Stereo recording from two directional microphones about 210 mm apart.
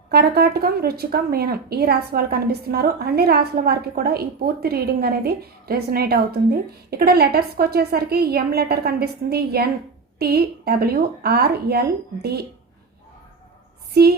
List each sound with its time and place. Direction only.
0.1 s a woman's voice: 50° right (ahead or behind)
14.0 s a woman's voice: 50° right (ahead or behind)